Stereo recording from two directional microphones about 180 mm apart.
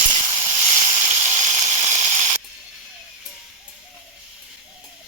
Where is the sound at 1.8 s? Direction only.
40° right (ahead or behind).